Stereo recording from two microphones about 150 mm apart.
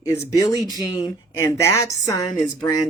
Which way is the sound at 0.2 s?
25° left (ahead or behind).